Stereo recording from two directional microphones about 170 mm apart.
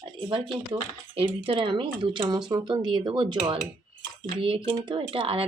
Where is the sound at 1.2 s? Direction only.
30° right (ahead or behind).